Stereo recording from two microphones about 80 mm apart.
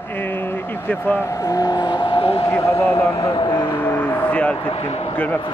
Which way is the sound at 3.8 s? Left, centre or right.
Left.